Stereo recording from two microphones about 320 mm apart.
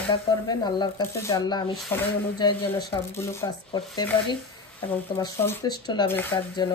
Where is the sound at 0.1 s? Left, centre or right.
Centre.